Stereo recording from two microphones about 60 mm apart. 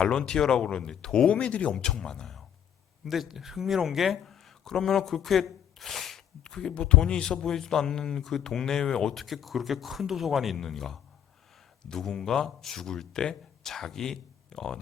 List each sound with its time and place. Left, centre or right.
0.0 s speech: centre
3.0 s speech: centre